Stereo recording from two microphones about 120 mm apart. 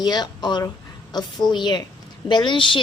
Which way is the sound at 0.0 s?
35° left (ahead or behind).